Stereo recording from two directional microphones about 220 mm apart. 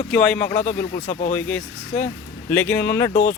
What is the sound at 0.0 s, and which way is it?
Speech, 5° left (ahead or behind).